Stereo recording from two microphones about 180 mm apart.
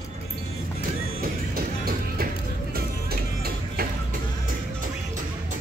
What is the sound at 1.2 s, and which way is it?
Music, 55° right (ahead or behind).